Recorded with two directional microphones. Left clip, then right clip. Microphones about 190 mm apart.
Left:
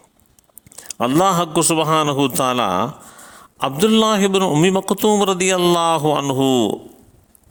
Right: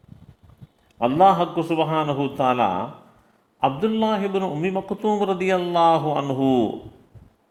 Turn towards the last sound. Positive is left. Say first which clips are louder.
# left 4 dB
turn(degrees=50)  # may be behind; listen again after turning